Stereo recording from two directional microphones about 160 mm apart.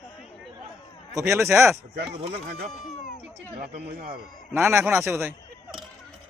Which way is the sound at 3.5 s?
70° right (ahead or behind).